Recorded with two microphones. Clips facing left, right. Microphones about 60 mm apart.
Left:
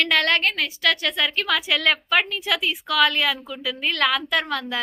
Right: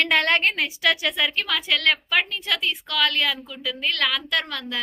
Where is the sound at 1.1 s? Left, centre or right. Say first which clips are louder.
Left 2 dB; centre.